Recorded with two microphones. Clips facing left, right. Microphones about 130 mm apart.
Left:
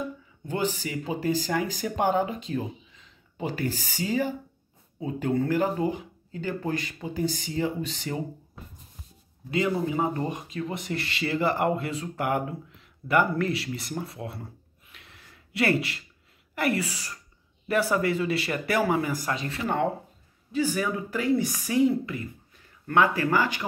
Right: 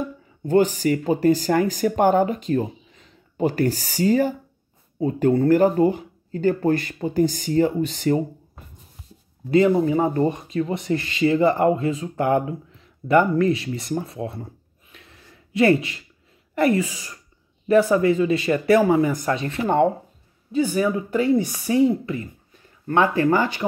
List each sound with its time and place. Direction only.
0.5 s speech: 40° right (ahead or behind)
9.5 s speech: 35° right (ahead or behind)
10.9 s speech: 20° right (ahead or behind)
15.5 s speech: 20° right (ahead or behind)
16.8 s speech: 15° right (ahead or behind)